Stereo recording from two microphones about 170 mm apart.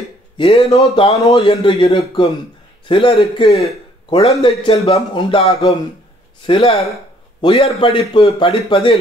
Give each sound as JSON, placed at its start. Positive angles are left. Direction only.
{"t": 0.4, "sound": "speech", "side_deg": 35}